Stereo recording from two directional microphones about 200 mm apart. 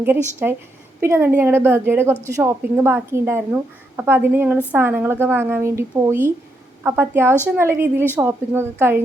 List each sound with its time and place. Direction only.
0.4 s a woman's voice: 5° right (ahead or behind)